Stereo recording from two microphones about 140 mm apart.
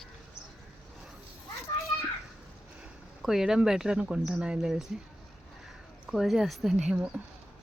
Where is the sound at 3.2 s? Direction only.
5° right (ahead or behind).